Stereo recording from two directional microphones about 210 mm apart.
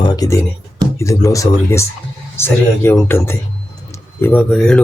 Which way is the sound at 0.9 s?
15° left (ahead or behind).